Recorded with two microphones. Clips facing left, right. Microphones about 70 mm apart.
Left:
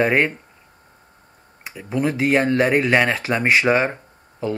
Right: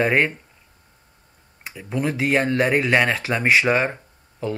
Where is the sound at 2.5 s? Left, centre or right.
Centre.